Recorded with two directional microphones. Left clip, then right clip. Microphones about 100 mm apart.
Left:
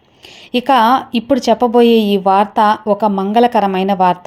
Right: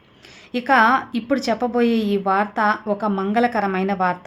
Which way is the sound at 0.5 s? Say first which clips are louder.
Left 5 dB; 65° left (ahead or behind).